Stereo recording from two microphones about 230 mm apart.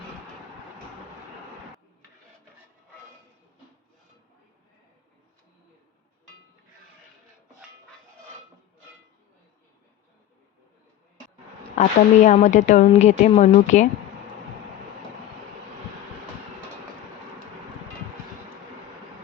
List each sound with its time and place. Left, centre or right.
11.8 s a woman's voice: left